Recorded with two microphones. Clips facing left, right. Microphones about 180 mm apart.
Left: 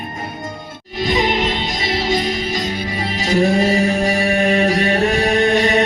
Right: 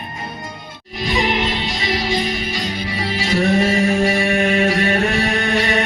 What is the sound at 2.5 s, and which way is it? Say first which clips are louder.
Music: left 2 dB; 45° left (ahead or behind).